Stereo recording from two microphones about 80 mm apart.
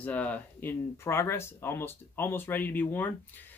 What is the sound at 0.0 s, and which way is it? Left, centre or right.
Speech, centre.